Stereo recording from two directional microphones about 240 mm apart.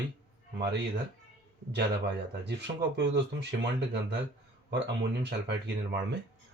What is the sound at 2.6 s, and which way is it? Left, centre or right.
Speech, right.